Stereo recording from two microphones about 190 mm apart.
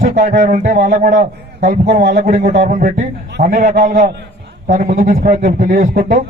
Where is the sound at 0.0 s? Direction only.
45° right (ahead or behind).